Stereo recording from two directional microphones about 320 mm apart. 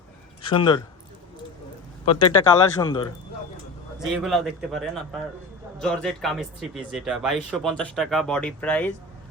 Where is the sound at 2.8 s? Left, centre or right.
Centre.